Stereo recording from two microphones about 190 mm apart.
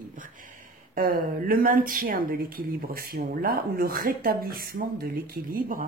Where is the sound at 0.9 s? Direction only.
50° right (ahead or behind).